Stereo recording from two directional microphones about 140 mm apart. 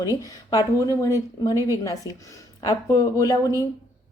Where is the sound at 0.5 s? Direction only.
25° left (ahead or behind).